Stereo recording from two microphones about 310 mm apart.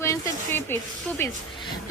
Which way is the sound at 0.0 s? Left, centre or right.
Centre.